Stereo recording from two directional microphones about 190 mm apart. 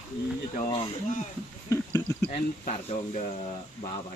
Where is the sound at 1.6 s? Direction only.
15° left (ahead or behind).